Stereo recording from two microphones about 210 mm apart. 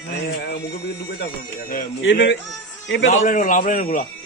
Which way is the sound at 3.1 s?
35° left (ahead or behind).